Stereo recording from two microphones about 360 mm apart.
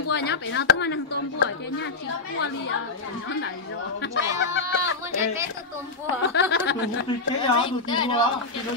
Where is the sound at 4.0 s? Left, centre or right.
Left.